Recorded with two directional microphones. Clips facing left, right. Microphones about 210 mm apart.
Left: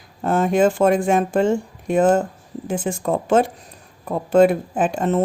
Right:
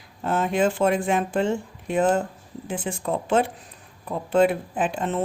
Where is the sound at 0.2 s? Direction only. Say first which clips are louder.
Left 5 dB; 45° left (ahead or behind).